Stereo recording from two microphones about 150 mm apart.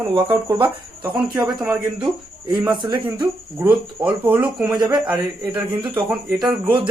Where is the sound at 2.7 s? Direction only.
30° right (ahead or behind).